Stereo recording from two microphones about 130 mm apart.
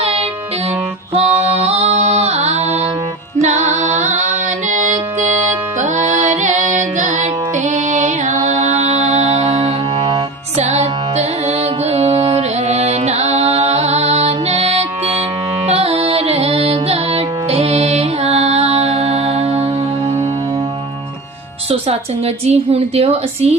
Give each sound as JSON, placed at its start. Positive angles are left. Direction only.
{"t": 0.0, "sound": "music", "side_deg": -50}
{"t": 8.4, "sound": "music", "side_deg": -60}
{"t": 21.7, "sound": "a woman's voice", "side_deg": -50}